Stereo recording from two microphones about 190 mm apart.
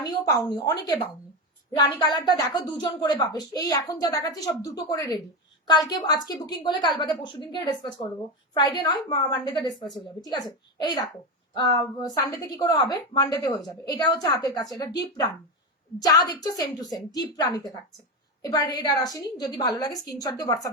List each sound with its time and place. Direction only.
0.0 s a woman's voice: 20° left (ahead or behind)